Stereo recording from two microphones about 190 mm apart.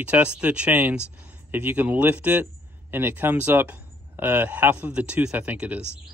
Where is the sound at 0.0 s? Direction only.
5° right (ahead or behind).